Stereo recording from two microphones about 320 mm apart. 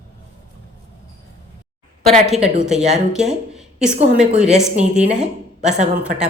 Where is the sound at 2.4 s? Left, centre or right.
Right.